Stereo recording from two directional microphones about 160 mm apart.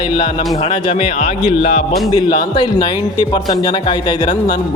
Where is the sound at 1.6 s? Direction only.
60° left (ahead or behind).